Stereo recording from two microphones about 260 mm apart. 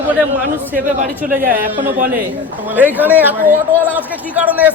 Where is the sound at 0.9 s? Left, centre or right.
Right.